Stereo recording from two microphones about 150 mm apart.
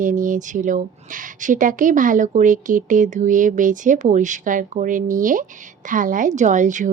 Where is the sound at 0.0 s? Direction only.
60° right (ahead or behind).